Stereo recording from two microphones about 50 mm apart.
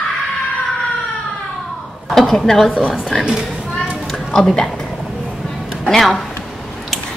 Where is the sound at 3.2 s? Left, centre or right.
Centre.